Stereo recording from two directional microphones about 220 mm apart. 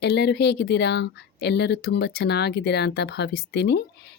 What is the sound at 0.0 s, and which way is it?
Speech, 50° left (ahead or behind).